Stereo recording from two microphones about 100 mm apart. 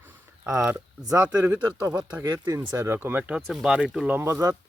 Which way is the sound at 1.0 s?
35° right (ahead or behind).